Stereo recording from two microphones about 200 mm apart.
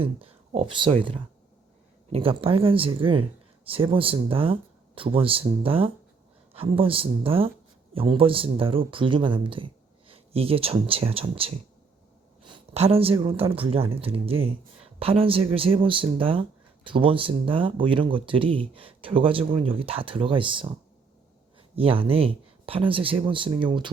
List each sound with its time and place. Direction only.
0.0 s a woman's voice: 30° right (ahead or behind)
21.8 s speech: 25° right (ahead or behind)